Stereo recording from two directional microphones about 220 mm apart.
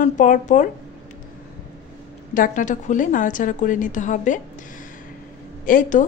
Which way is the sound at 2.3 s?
35° left (ahead or behind).